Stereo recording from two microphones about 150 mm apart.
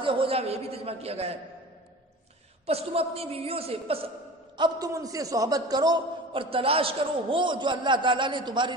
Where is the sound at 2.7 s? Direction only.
40° right (ahead or behind).